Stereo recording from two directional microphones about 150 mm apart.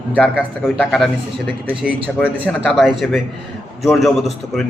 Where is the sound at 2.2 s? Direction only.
5° left (ahead or behind).